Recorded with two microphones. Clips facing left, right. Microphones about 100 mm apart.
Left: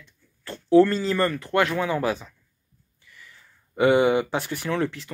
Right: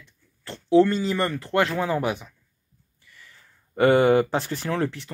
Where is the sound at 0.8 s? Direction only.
20° right (ahead or behind).